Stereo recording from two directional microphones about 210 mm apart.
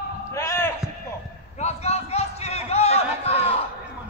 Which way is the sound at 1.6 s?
30° left (ahead or behind).